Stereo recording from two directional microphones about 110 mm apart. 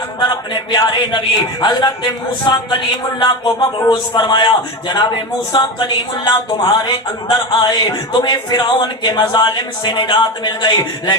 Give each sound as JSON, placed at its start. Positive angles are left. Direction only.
{"t": 0.2, "sound": "a man's voice", "side_deg": 45}